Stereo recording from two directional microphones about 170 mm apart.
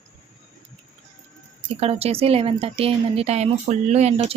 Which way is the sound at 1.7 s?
35° right (ahead or behind).